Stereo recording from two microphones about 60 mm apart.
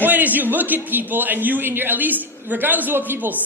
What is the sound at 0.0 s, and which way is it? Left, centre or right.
A man's voice, right.